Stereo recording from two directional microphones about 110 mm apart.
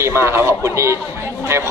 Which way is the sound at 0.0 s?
25° right (ahead or behind).